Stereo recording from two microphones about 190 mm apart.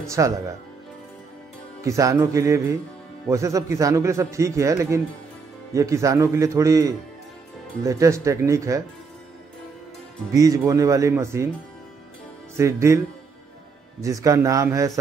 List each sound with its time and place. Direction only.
0.2 s a man's voice: 15° right (ahead or behind)
1.8 s a man's voice: 15° right (ahead or behind)
10.3 s a man's voice: 20° right (ahead or behind)
12.5 s a man's voice: 15° right (ahead or behind)
14.0 s a man's voice: 15° right (ahead or behind)